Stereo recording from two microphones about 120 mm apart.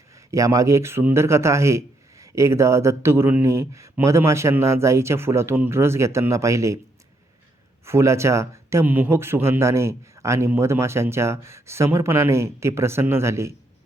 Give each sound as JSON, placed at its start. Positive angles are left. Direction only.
{"t": 0.3, "sound": "a man's voice", "side_deg": -25}
{"t": 7.9, "sound": "a man's voice", "side_deg": -20}